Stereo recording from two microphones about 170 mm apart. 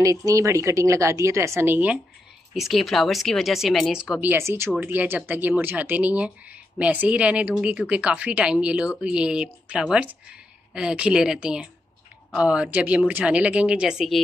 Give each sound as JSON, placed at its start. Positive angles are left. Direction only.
{"t": 0.0, "sound": "speech", "side_deg": -20}
{"t": 2.5, "sound": "speech", "side_deg": 0}